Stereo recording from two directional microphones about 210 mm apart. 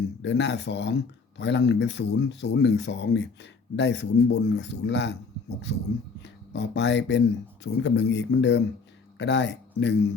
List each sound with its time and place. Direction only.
0.2 s speech: 55° left (ahead or behind)
6.2 s speech: 55° left (ahead or behind)